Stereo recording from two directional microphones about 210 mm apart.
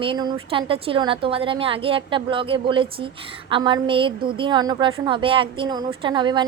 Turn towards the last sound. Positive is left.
turn(degrees=-20)  # may be behind; listen again after turning